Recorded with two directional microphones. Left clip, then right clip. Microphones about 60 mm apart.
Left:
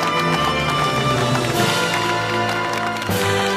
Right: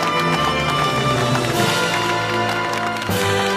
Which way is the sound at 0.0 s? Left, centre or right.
Right.